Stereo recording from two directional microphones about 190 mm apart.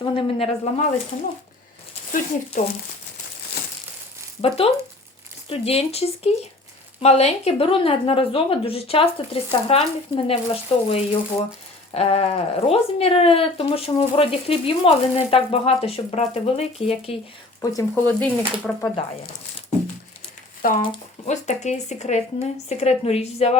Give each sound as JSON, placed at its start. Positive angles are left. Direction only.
{"t": 0.0, "sound": "speech", "side_deg": 30}
{"t": 2.6, "sound": "speech", "side_deg": 45}
{"t": 4.4, "sound": "speech", "side_deg": 30}
{"t": 17.6, "sound": "speech", "side_deg": 15}
{"t": 20.6, "sound": "speech", "side_deg": 45}